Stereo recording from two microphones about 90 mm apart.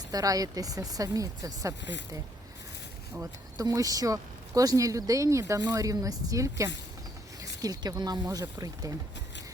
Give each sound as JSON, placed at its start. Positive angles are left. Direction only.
{"t": 0.1, "sound": "speech", "side_deg": -40}
{"t": 3.6, "sound": "speech", "side_deg": -40}